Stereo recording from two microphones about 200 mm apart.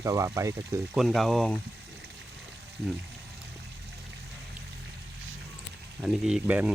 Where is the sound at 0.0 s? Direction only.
15° right (ahead or behind).